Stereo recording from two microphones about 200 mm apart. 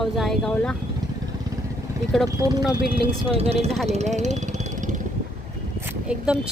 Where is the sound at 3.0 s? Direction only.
30° right (ahead or behind).